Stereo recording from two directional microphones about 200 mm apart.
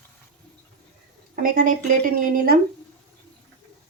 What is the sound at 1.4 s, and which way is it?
A woman's voice, 45° right (ahead or behind).